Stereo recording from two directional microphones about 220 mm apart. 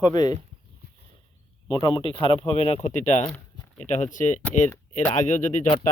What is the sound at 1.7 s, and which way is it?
Speech, 20° left (ahead or behind).